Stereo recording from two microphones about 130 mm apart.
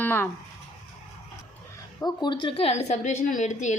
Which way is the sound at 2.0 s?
35° left (ahead or behind).